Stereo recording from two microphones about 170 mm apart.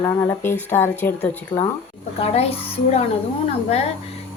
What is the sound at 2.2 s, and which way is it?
Speech, 40° left (ahead or behind).